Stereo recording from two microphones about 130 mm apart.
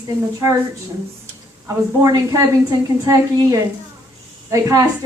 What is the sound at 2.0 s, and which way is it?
A woman's voice, 25° right (ahead or behind).